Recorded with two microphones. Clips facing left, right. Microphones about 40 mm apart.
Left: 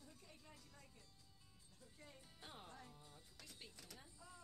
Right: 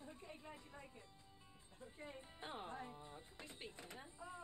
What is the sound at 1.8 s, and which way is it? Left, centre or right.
Music, right.